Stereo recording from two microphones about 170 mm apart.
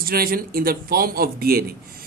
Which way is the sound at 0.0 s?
60° right (ahead or behind).